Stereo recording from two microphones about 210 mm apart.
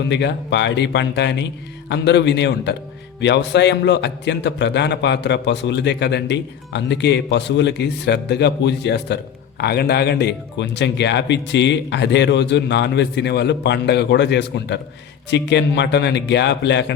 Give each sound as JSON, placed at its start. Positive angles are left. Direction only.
{"t": 0.1, "sound": "a man's voice", "side_deg": 55}